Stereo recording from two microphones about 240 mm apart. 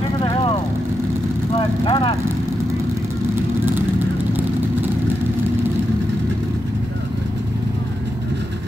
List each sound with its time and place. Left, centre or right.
0.2 s vehicle: left
1.9 s speech: left